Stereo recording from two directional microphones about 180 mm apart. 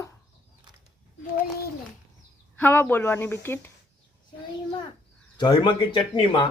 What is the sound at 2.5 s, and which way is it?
Speech, 10° left (ahead or behind).